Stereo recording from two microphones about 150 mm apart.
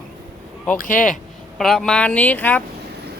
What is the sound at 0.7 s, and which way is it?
Speech, 65° left (ahead or behind).